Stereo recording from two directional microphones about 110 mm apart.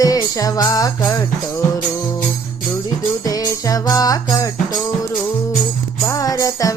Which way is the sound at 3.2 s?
35° left (ahead or behind).